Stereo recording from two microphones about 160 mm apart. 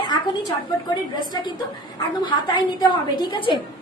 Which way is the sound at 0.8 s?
25° left (ahead or behind).